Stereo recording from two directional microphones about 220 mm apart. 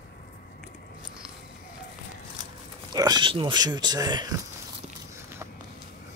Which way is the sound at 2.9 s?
20° right (ahead or behind).